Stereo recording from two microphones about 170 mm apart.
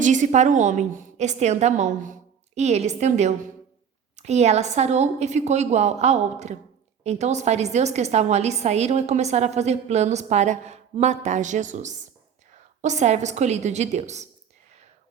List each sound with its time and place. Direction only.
0.0 s a woman's voice: 45° right (ahead or behind)